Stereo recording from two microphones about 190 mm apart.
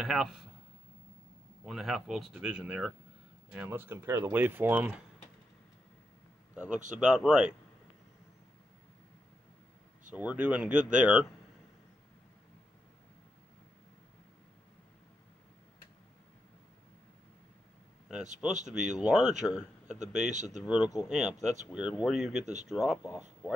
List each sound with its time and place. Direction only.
0.0 s speech: centre (ahead or behind)
1.6 s speech: centre (ahead or behind)
6.5 s speech: 5° right (ahead or behind)
10.1 s speech: 5° right (ahead or behind)
18.7 s speech: 5° right (ahead or behind)
20.2 s speech: 40° right (ahead or behind)
20.6 s speech: 5° right (ahead or behind)